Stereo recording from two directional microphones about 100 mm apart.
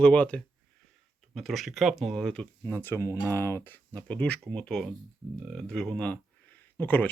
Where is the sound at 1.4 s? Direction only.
Centre (ahead or behind).